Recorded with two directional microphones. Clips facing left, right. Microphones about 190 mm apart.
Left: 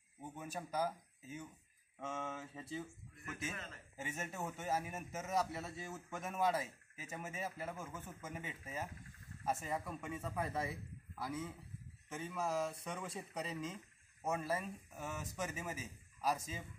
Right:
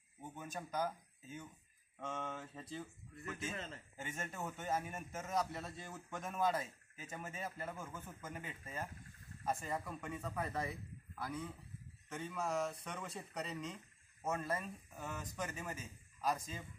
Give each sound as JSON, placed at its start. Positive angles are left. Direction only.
{"t": 0.2, "sound": "a man's voice", "side_deg": 5}
{"t": 3.4, "sound": "a man's voice", "side_deg": -30}
{"t": 3.9, "sound": "a man's voice", "side_deg": 5}